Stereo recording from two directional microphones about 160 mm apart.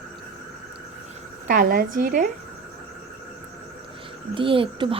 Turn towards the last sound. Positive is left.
turn(degrees=-30)  # may be behind; listen again after turning